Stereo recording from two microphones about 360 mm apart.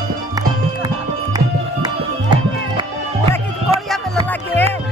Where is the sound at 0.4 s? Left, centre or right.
Centre.